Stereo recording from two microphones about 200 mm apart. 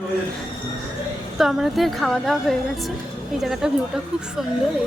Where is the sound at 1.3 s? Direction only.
Centre (ahead or behind).